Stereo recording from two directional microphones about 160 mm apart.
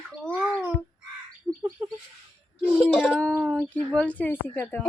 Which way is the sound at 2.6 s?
5° right (ahead or behind).